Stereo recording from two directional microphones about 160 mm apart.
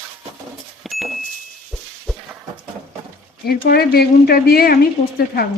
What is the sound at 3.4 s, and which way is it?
Speech, 75° left (ahead or behind).